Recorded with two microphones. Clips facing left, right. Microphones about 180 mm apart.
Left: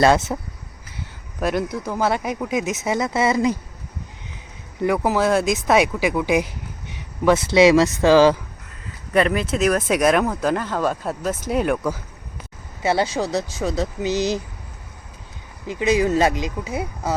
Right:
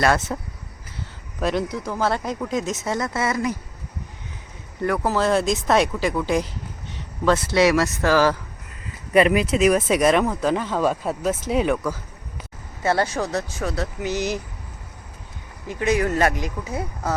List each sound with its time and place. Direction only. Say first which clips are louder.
0.3 s speech: left 2 dB; 10° left (ahead or behind)
4.8 s speech: left 2 dB; 15° left (ahead or behind)
5.3 s speech: even; centre (ahead or behind); by 8.4 s 20° left (ahead or behind)
9.1 s speech: right 2 dB; 10° right (ahead or behind)
12.8 s speech: left 1 dB; 15° left (ahead or behind)
14.1 s speech: left 4 dB; 90° left
15.6 s speech: left 2 dB; 20° left (ahead or behind)